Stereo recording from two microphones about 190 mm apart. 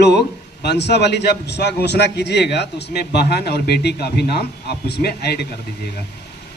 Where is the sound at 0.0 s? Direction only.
60° left (ahead or behind).